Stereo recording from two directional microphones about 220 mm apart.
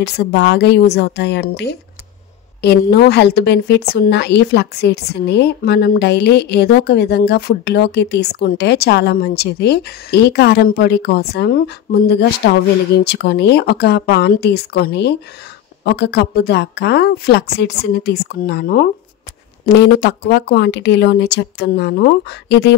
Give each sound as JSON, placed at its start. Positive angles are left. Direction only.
{"t": 0.0, "sound": "a woman's voice", "side_deg": 50}